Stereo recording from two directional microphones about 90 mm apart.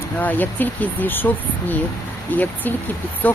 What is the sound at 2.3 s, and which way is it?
Speech, 20° left (ahead or behind).